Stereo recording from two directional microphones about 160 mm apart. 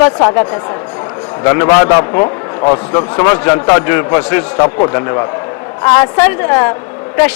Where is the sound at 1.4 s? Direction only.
20° left (ahead or behind).